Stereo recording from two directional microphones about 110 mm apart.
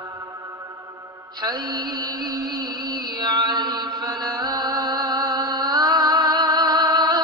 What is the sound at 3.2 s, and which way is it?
Mantra, 40° right (ahead or behind).